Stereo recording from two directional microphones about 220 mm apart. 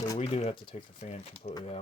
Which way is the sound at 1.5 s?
25° left (ahead or behind).